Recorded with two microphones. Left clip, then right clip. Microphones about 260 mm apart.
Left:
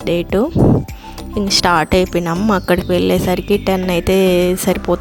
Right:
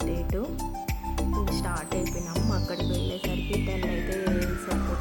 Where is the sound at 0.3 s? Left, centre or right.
Left.